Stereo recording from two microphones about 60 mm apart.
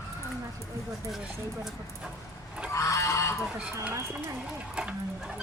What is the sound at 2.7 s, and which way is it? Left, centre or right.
Goose, left.